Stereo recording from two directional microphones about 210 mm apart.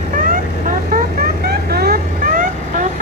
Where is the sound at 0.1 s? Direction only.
40° right (ahead or behind).